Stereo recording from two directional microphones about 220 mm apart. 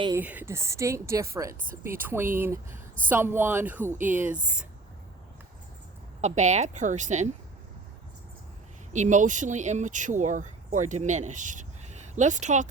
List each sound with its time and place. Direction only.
0.2 s a woman's voice: 10° right (ahead or behind)
2.7 s a sound: 40° right (ahead or behind)
3.1 s a woman's voice: 10° right (ahead or behind)
3.9 s speech: 35° right (ahead or behind)
6.2 s speech: 30° right (ahead or behind)
8.9 s speech: 35° right (ahead or behind)